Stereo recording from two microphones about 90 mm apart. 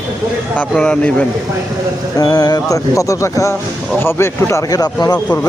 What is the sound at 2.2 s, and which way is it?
Speech, 45° left (ahead or behind).